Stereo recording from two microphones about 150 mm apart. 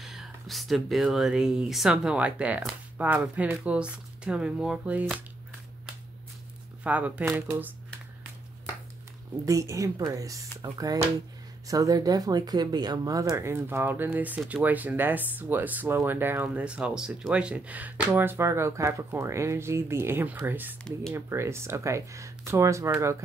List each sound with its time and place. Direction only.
0.0 s speech: centre (ahead or behind)
6.8 s speech: 10° right (ahead or behind)
9.5 s speech: 20° right (ahead or behind)